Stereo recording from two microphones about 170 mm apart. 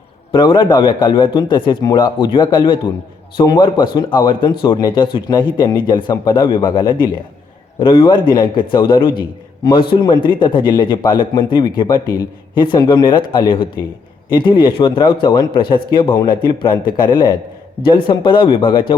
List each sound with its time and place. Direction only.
0.3 s speech: 25° left (ahead or behind)